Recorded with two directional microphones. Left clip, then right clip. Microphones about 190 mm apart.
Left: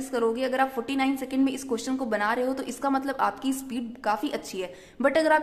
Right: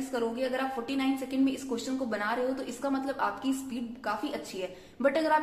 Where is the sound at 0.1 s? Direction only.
40° left (ahead or behind).